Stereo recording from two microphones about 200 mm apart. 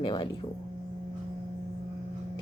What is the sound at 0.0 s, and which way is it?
Speech, 25° left (ahead or behind).